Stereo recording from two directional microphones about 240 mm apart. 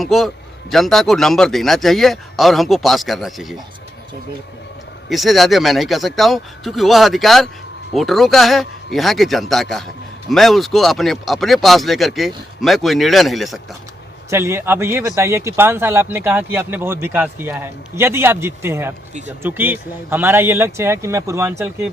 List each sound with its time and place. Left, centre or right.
0.0 s speech: centre
5.0 s speech: centre
14.3 s speech: centre